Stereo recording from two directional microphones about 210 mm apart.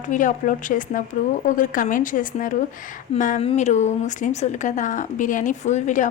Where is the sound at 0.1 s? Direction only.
40° left (ahead or behind).